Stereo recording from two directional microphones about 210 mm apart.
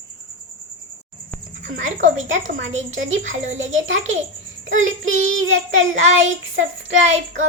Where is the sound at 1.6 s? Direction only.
65° right (ahead or behind).